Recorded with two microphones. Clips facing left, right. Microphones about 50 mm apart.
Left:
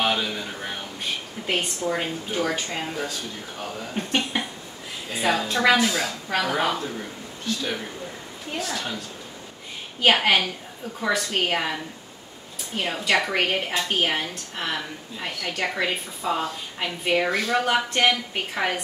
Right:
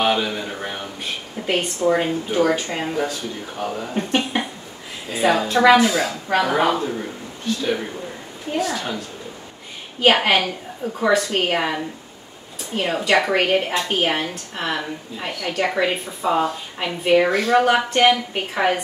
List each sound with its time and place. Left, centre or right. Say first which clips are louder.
0.0 s a sound: right 4 dB; centre
1.8 s a woman's voice: right 7 dB; centre
2.8 s speech: right 6 dB; right
3.9 s a sound: right 3 dB; centre
5.1 s a woman's voice: right 6 dB; centre
8.5 s a woman's voice: right 6 dB; centre